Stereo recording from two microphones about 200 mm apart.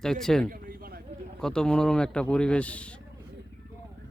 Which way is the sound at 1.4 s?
5° left (ahead or behind).